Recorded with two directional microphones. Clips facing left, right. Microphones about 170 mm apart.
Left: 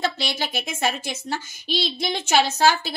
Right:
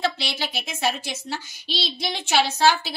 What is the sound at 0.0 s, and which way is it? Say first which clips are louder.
A woman's voice: left 1 dB; 45° left (ahead or behind).